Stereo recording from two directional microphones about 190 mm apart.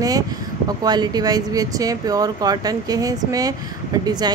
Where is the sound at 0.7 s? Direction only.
20° right (ahead or behind).